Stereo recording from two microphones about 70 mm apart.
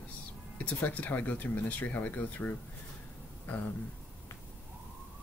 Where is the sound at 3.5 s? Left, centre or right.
Left.